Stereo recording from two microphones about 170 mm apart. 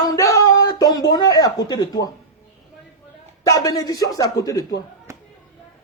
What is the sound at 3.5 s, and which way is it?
Speech, 20° left (ahead or behind).